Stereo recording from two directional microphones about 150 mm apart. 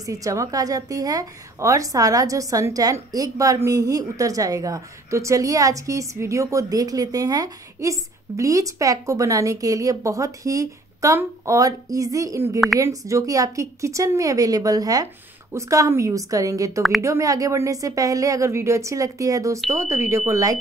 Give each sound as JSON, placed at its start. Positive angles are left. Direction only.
{"t": 0.0, "sound": "a woman's voice", "side_deg": -20}